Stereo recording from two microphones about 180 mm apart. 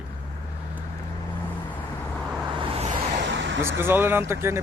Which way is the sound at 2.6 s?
30° right (ahead or behind).